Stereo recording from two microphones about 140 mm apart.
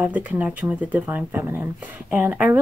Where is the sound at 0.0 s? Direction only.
10° right (ahead or behind).